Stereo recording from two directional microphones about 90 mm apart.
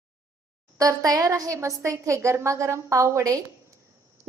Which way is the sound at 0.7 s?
40° right (ahead or behind).